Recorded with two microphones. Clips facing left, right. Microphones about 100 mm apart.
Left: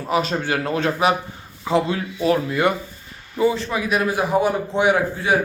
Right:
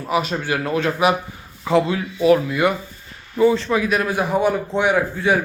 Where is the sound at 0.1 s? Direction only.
30° left (ahead or behind).